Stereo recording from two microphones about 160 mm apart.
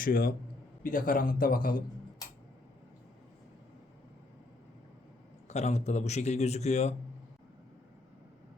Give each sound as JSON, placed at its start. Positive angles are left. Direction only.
{"t": 0.0, "sound": "a man's voice", "side_deg": 60}
{"t": 5.5, "sound": "a man's voice", "side_deg": 45}